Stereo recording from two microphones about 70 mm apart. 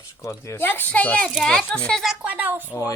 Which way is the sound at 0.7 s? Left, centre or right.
Left.